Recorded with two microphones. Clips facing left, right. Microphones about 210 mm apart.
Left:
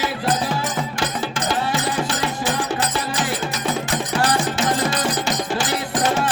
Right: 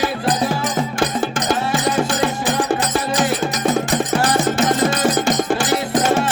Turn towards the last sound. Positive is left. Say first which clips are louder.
# right 5 dB
turn(degrees=-50)  # may be behind; listen again after turning